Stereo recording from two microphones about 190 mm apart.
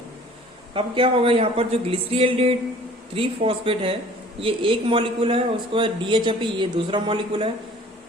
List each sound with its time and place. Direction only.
0.7 s a man's voice: 30° right (ahead or behind)